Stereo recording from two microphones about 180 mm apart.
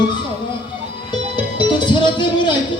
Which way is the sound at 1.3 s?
25° left (ahead or behind).